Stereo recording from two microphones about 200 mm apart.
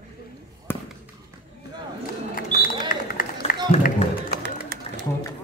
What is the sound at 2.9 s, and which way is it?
Run, 45° left (ahead or behind).